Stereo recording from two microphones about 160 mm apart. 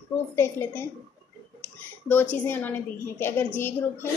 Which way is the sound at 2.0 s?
10° left (ahead or behind).